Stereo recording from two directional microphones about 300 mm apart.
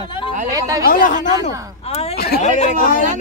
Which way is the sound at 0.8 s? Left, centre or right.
Left.